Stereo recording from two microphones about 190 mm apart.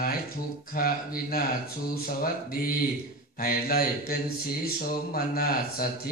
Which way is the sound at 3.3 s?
50° left (ahead or behind).